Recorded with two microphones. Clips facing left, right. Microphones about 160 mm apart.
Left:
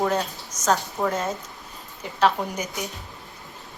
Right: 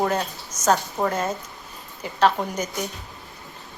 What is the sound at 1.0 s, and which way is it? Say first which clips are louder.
Speech: right 1 dB; 35° right (ahead or behind).